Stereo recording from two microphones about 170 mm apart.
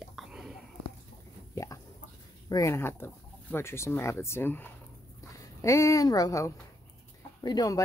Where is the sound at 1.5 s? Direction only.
20° left (ahead or behind).